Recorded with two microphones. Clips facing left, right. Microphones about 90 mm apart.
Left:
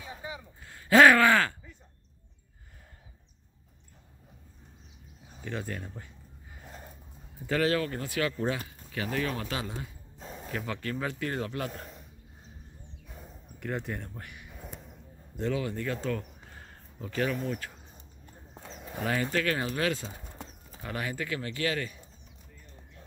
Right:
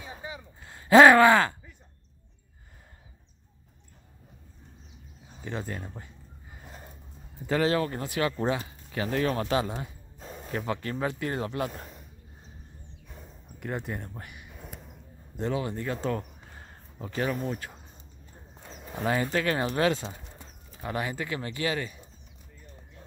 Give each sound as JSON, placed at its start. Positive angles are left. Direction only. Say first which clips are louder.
{"t": 0.0, "sound": "a sound", "louder": "even", "side_deg": -25}
{"t": 5.4, "sound": "speech", "louder": "right 1 dB", "side_deg": -20}
{"t": 6.6, "sound": "gasp", "louder": "even", "side_deg": 0}
{"t": 7.4, "sound": "speech", "louder": "right 2 dB", "side_deg": -20}
{"t": 10.1, "sound": "a sound", "louder": "even", "side_deg": 0}
{"t": 10.5, "sound": "speech", "louder": "right 3 dB", "side_deg": -25}
{"t": 11.7, "sound": "a man's voice", "louder": "even", "side_deg": -5}
{"t": 13.6, "sound": "speech", "louder": "right 1 dB", "side_deg": -15}
{"t": 15.3, "sound": "speech", "louder": "right 1 dB", "side_deg": -30}
{"t": 19.0, "sound": "speech", "louder": "right 2 dB", "side_deg": -20}
{"t": 20.8, "sound": "speech", "louder": "right 3 dB", "side_deg": -20}